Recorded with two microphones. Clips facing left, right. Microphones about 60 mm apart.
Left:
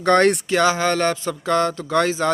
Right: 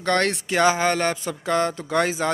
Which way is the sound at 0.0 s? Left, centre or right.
Centre.